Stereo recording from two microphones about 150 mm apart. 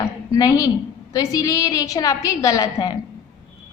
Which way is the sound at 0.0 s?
25° left (ahead or behind).